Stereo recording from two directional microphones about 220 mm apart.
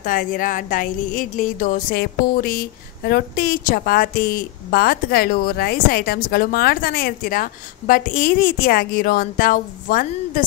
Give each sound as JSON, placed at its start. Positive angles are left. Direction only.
{"t": 0.0, "sound": "speech", "side_deg": 40}